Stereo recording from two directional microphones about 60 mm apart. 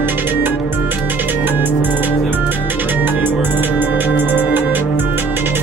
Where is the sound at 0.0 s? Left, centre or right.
Right.